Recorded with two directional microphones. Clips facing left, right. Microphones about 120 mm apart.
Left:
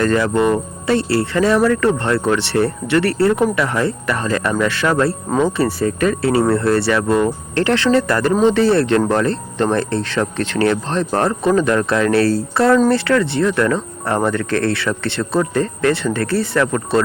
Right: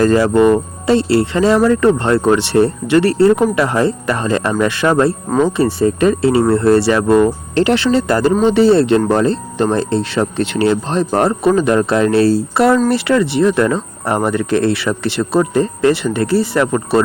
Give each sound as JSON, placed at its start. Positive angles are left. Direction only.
{"t": 0.0, "sound": "speech", "side_deg": -25}